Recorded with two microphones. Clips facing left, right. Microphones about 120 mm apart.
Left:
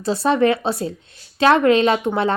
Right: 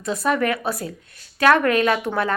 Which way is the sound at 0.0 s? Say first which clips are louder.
Left 5 dB; 30° left (ahead or behind).